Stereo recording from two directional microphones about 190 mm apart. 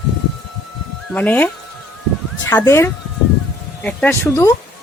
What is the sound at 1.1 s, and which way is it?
Speech, 10° left (ahead or behind).